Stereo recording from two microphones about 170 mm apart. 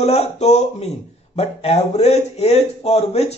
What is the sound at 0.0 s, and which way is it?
Speech, 40° left (ahead or behind).